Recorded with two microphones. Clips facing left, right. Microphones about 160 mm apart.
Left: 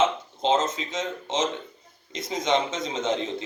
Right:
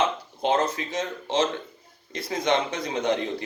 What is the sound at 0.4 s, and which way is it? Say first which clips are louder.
A man's voice: even; 20° left (ahead or behind).